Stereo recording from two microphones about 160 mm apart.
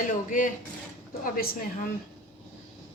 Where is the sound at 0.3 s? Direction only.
55° left (ahead or behind).